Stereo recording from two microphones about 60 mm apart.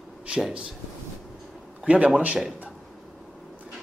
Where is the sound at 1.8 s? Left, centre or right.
Right.